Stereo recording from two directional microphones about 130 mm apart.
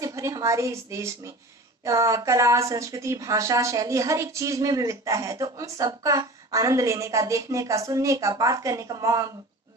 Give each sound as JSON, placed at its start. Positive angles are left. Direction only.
{"t": 0.0, "sound": "a woman's voice", "side_deg": -25}